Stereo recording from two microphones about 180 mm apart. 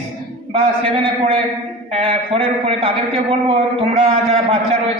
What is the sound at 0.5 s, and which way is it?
A man's voice, 30° right (ahead or behind).